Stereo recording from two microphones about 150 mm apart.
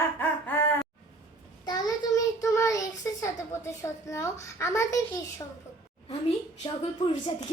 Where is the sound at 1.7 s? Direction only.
25° left (ahead or behind).